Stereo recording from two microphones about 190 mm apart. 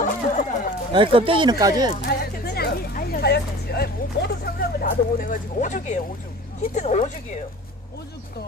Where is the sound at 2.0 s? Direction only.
55° left (ahead or behind); by 6.0 s 40° left (ahead or behind).